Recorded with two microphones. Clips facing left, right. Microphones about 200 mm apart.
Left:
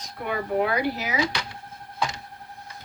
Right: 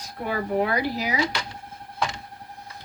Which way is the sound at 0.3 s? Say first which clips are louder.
Even; 35° right (ahead or behind).